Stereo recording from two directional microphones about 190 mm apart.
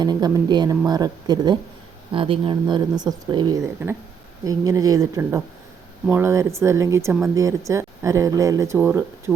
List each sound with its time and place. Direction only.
0.0 s speech: 20° right (ahead or behind)